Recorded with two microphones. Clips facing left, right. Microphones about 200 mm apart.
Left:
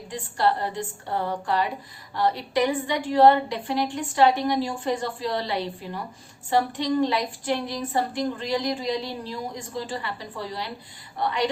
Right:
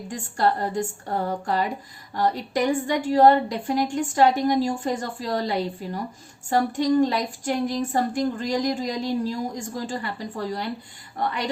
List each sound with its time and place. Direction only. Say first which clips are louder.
0.1 s a woman's voice: right 1 dB; 45° right (ahead or behind)